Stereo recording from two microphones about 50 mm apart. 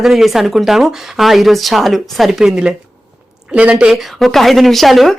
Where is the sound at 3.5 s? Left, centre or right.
Right.